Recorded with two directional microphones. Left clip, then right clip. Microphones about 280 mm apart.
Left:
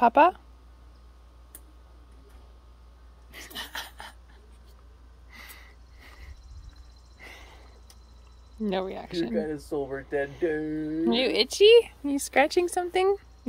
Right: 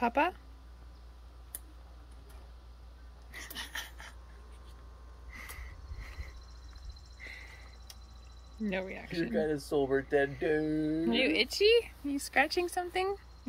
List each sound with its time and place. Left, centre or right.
0.0 s speech: centre
3.5 s a sound: centre
8.6 s speech: centre
9.3 s speech: right
11.1 s speech: left